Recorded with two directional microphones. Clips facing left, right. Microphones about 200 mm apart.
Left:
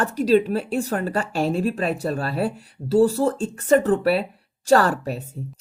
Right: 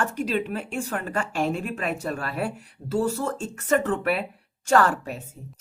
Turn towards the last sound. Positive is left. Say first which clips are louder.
# left 3 dB
turn(degrees=35)  # may be behind; listen again after turning